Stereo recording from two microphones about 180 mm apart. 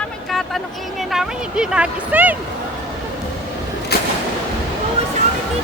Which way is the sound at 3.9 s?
65° left (ahead or behind).